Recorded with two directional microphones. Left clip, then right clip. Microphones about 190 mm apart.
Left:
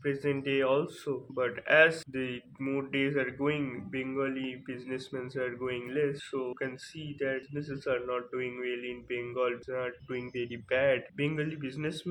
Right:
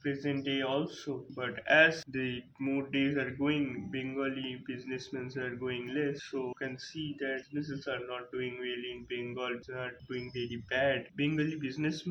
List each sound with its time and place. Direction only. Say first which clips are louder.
0.0 s speech: left 3 dB; 25° left (ahead or behind)